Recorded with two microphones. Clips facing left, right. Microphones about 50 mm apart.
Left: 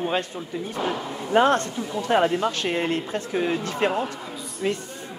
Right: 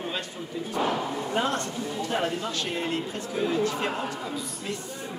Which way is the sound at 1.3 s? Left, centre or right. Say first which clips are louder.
Left 10 dB; left.